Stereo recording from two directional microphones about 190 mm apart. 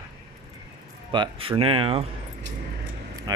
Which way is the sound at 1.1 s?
25° right (ahead or behind).